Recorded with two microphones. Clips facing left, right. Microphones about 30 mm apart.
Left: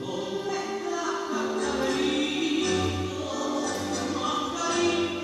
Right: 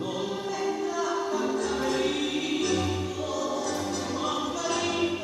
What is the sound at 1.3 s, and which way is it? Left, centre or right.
Music, centre.